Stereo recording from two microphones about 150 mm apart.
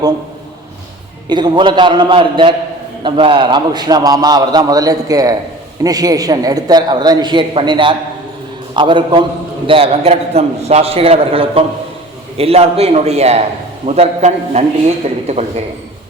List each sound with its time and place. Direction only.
1.3 s a man's voice: 30° right (ahead or behind); by 14.6 s 45° right (ahead or behind)